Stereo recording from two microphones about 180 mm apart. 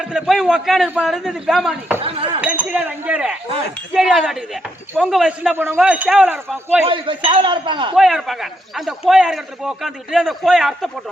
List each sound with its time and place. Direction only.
0.0 s a man's voice: 5° right (ahead or behind)
2.1 s speech: 30° right (ahead or behind)
2.4 s a man's voice: 5° right (ahead or behind)
6.8 s a man's voice: 30° right (ahead or behind)
7.9 s a man's voice: centre (ahead or behind)